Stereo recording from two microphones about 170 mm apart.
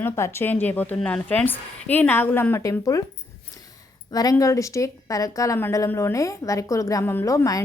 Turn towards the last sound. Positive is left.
turn(degrees=20)  # may be behind; listen again after turning